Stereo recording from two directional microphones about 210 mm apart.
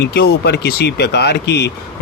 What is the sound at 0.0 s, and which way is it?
Speech, 50° left (ahead or behind).